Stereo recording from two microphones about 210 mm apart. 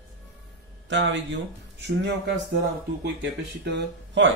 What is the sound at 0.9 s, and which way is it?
Speech, 60° right (ahead or behind).